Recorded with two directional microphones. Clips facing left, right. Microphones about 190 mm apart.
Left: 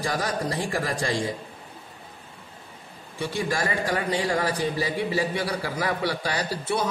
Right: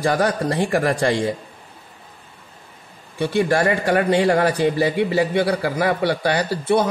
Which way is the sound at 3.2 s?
65° right (ahead or behind).